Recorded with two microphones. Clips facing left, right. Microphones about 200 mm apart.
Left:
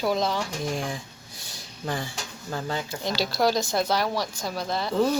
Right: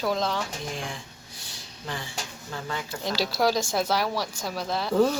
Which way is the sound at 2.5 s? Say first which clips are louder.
Left 5 dB; 40° left (ahead or behind).